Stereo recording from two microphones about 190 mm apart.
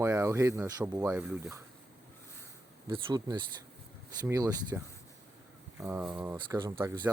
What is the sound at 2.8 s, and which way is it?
Speech, 20° right (ahead or behind).